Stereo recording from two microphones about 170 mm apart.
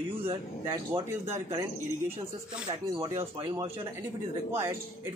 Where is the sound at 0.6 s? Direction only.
15° right (ahead or behind).